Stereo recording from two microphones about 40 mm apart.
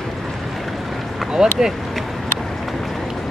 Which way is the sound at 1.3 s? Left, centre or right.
Centre.